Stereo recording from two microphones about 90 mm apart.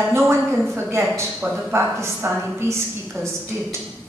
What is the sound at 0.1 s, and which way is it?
Speech, 30° right (ahead or behind).